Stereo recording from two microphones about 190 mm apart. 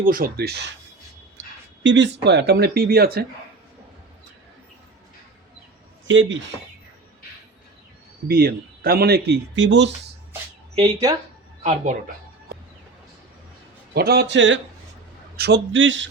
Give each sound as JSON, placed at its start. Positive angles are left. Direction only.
{"t": 0.0, "sound": "speech", "side_deg": -50}
{"t": 1.8, "sound": "speech", "side_deg": -70}
{"t": 6.1, "sound": "a man's voice", "side_deg": -75}
{"t": 8.3, "sound": "speech", "side_deg": -50}
{"t": 10.8, "sound": "speech", "side_deg": -20}
{"t": 13.9, "sound": "speech", "side_deg": -55}
{"t": 15.4, "sound": "a man's voice", "side_deg": -60}